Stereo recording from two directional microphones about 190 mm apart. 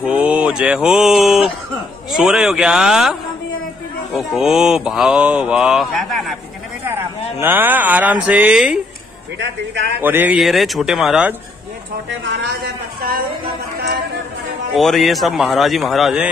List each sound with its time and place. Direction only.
0.0 s mantra: 5° right (ahead or behind)
6.9 s speech: 15° right (ahead or behind)
9.4 s a man's voice: 65° right (ahead or behind)
9.9 s mantra: 10° right (ahead or behind)
12.1 s a sound: 70° right (ahead or behind)
14.7 s mantra: centre (ahead or behind)